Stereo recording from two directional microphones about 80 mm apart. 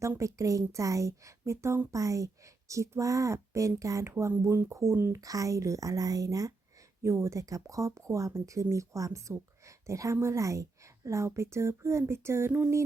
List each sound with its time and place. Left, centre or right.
0.2 s a woman's voice: right
7.0 s a woman's voice: right